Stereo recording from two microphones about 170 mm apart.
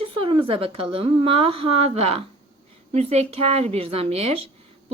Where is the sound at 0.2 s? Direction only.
30° right (ahead or behind).